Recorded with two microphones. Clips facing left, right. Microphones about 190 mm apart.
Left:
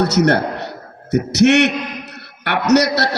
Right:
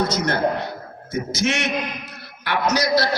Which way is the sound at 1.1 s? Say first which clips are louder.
Left 11 dB; 65° left (ahead or behind).